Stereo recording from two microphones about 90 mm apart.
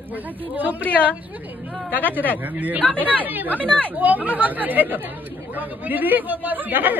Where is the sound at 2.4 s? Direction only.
20° right (ahead or behind).